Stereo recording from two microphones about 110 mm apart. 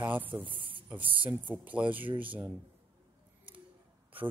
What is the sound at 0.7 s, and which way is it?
Speech, 15° right (ahead or behind).